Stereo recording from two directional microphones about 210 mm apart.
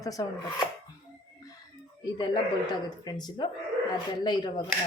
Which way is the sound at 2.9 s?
20° left (ahead or behind).